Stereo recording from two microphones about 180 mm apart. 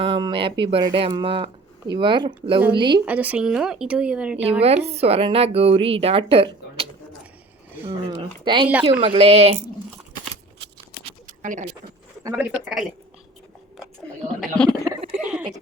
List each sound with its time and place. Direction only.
0.0 s speech: 25° right (ahead or behind)
3.1 s speech: 10° right (ahead or behind)
4.6 s speech: 35° right (ahead or behind)
7.9 s speech: 30° right (ahead or behind)
10.6 s a sound: 75° right (ahead or behind)
11.3 s a sound: 45° right (ahead or behind)
12.4 s speech: 5° right (ahead or behind)
14.4 s speech: 5° left (ahead or behind)